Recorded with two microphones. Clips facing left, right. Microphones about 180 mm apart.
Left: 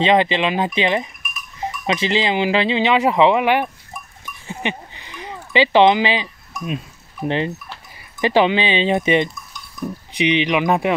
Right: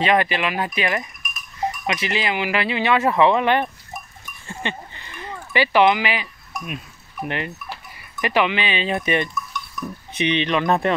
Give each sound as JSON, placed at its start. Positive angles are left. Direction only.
{"t": 0.0, "sound": "speech", "side_deg": 20}
{"t": 4.5, "sound": "a sound", "side_deg": 15}
{"t": 6.6, "sound": "speech", "side_deg": 30}